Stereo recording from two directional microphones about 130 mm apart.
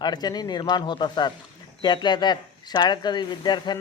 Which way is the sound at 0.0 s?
35° left (ahead or behind).